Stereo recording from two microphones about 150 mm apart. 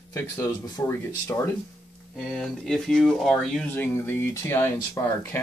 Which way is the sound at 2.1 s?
Centre (ahead or behind).